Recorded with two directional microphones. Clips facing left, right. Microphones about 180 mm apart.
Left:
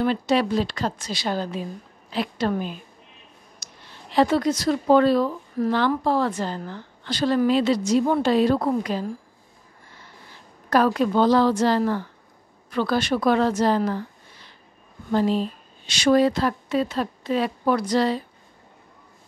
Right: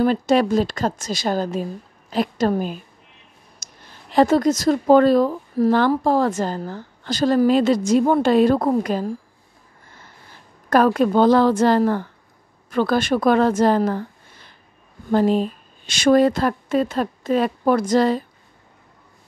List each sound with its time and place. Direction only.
0.0 s speech: 45° right (ahead or behind)
10.7 s speech: 50° right (ahead or behind)
15.0 s speech: 50° right (ahead or behind)